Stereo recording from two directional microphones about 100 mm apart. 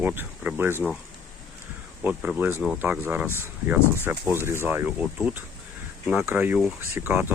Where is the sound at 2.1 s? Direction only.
10° right (ahead or behind).